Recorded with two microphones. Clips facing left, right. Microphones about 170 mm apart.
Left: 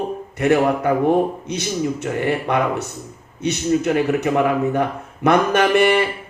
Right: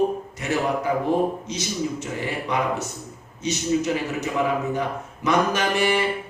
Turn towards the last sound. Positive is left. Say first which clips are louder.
# left 7 dB
turn(degrees=60)  # may be behind; listen again after turning